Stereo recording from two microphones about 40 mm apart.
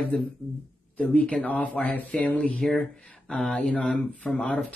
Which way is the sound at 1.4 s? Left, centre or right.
Left.